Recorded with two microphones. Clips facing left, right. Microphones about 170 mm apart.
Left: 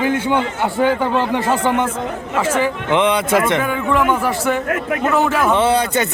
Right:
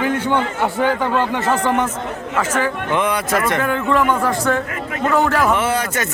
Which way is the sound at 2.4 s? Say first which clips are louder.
Left 2 dB; 10° left (ahead or behind).